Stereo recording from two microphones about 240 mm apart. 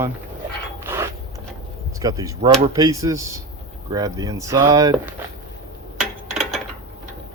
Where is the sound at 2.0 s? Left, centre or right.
Centre.